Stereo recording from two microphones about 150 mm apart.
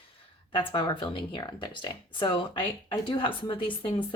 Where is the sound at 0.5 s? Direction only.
30° left (ahead or behind).